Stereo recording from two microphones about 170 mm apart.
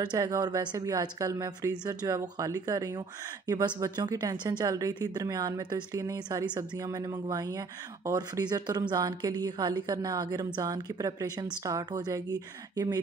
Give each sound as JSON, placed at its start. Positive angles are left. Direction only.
{"t": 0.0, "sound": "speech", "side_deg": -25}
{"t": 8.1, "sound": "speech", "side_deg": -20}